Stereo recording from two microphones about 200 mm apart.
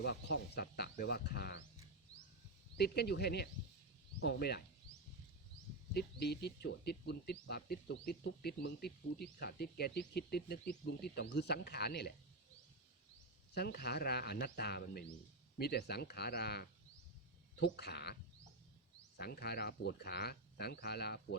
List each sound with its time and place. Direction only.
0.0 s speech: 55° left (ahead or behind)
2.1 s a sound: 70° left (ahead or behind)
2.7 s speech: 55° left (ahead or behind)
5.9 s speech: 50° left (ahead or behind)
13.5 s speech: 50° left (ahead or behind)